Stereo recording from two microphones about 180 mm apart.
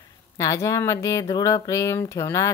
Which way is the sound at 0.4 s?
20° left (ahead or behind).